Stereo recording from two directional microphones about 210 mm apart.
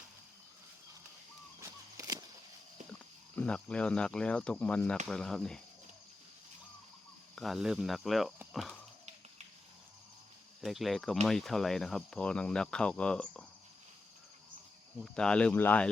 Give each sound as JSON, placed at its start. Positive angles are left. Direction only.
{"t": 1.6, "sound": "crow", "side_deg": -15}
{"t": 3.3, "sound": "speech", "side_deg": 5}
{"t": 7.3, "sound": "speech", "side_deg": 0}
{"t": 8.5, "sound": "a sound", "side_deg": 5}
{"t": 10.6, "sound": "speech", "side_deg": 0}
{"t": 15.0, "sound": "speech", "side_deg": 5}